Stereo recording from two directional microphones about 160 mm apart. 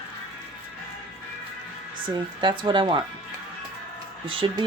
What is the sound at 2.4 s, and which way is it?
Speech, 30° right (ahead or behind).